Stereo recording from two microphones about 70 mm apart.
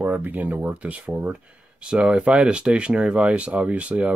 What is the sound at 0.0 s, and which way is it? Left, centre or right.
Speech, right.